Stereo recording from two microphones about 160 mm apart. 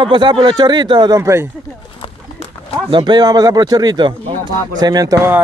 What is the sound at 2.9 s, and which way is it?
A man's voice, 30° right (ahead or behind).